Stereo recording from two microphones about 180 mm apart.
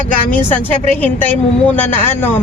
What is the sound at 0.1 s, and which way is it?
A woman's voice, 10° left (ahead or behind).